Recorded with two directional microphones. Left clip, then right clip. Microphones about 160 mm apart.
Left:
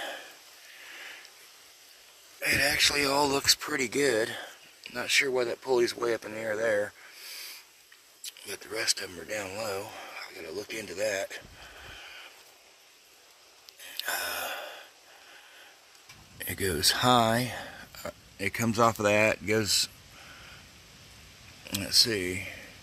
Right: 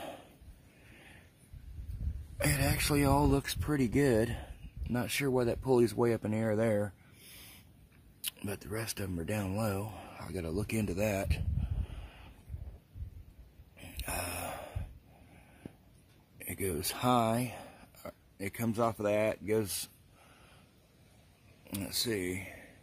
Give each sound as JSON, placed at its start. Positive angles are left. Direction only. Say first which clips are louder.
{"t": 2.5, "sound": "speech", "louder": "left 10 dB", "side_deg": -20}
{"t": 3.3, "sound": "speech", "louder": "left 7 dB", "side_deg": 0}
{"t": 3.7, "sound": "speech", "louder": "left 3 dB", "side_deg": -15}
{"t": 8.6, "sound": "speech", "louder": "left 12 dB", "side_deg": -15}
{"t": 14.0, "sound": "gasp", "louder": "left 6 dB", "side_deg": -25}
{"t": 16.3, "sound": "speech", "louder": "left 6 dB", "side_deg": -20}
{"t": 18.8, "sound": "speech", "louder": "left 7 dB", "side_deg": 5}
{"t": 21.6, "sound": "speech", "louder": "left 11 dB", "side_deg": -20}